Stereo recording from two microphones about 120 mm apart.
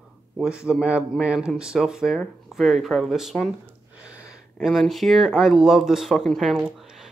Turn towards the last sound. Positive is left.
turn(degrees=-5)  # may be behind; listen again after turning